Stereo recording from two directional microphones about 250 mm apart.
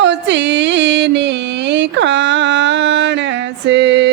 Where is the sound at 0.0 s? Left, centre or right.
Right.